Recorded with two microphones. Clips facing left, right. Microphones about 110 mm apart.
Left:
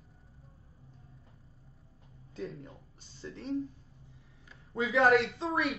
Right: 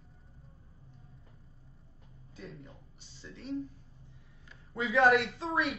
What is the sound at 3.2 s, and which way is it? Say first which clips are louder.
Speech: left 3 dB; 35° left (ahead or behind).